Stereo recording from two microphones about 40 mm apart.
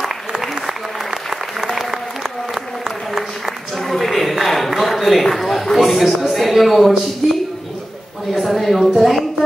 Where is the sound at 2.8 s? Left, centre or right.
Centre.